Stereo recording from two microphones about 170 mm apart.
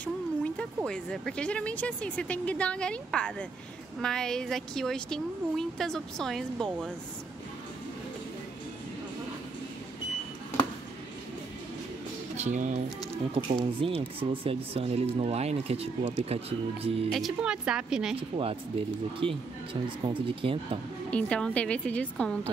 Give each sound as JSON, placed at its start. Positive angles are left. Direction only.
{"t": 0.0, "sound": "music", "side_deg": 10}
{"t": 0.8, "sound": "speech", "side_deg": 5}
{"t": 12.4, "sound": "speech", "side_deg": -45}
{"t": 13.6, "sound": "speech", "side_deg": -30}
{"t": 17.1, "sound": "speech", "side_deg": -5}
{"t": 18.3, "sound": "speech", "side_deg": -35}
{"t": 21.1, "sound": "speech", "side_deg": 5}